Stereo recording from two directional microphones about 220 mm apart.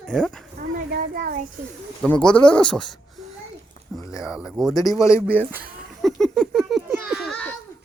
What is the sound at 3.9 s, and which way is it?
A child's voice, centre (ahead or behind).